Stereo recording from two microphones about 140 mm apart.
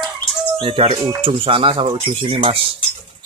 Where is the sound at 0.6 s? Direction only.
40° right (ahead or behind).